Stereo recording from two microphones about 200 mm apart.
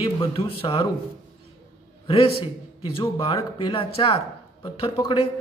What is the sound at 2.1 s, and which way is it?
A man's voice, 30° left (ahead or behind).